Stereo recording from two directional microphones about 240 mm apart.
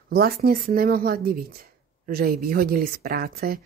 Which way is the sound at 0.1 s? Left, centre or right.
Right.